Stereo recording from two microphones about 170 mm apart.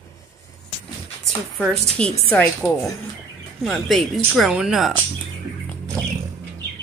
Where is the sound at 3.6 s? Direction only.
Centre (ahead or behind).